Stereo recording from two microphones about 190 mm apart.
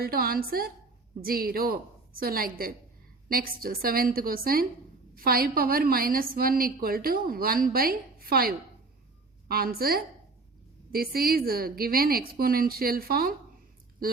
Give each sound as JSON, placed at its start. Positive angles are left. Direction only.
{"t": 0.0, "sound": "a woman's voice", "side_deg": -50}